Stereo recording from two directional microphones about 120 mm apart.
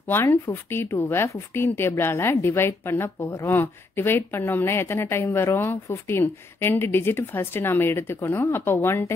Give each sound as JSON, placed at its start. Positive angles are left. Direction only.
{"t": 0.1, "sound": "a woman's voice", "side_deg": 20}